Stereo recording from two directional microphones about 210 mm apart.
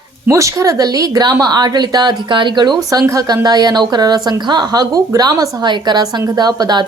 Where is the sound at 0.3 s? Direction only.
15° right (ahead or behind).